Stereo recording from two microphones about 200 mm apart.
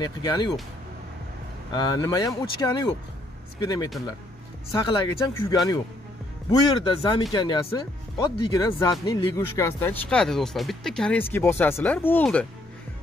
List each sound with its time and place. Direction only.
0.0 s speech: 20° left (ahead or behind)
1.7 s speech: 20° left (ahead or behind)